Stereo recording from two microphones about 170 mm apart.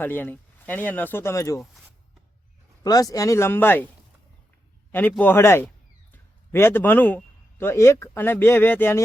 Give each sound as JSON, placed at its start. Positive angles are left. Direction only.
{"t": 0.0, "sound": "speech", "side_deg": 10}
{"t": 1.5, "sound": "speech", "side_deg": 0}
{"t": 2.8, "sound": "speech", "side_deg": 20}
{"t": 4.9, "sound": "a man's voice", "side_deg": 10}